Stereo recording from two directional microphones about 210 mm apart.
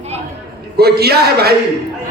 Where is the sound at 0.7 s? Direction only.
50° right (ahead or behind).